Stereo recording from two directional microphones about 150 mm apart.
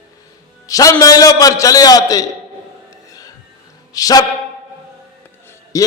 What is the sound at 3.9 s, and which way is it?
Speech, 25° left (ahead or behind).